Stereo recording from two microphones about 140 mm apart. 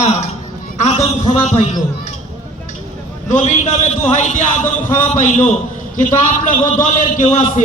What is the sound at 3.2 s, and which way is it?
A man's voice, 60° left (ahead or behind).